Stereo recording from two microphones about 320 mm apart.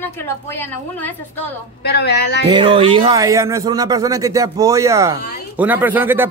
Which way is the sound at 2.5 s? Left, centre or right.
Centre.